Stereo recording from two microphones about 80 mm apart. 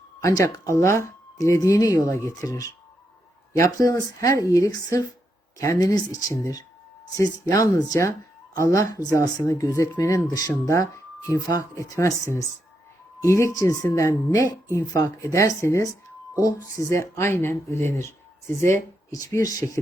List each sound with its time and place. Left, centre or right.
0.2 s speech: left
0.7 s speech: left
19.3 s speech: left